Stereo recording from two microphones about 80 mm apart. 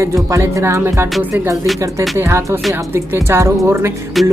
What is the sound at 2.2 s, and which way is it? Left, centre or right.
Music, right.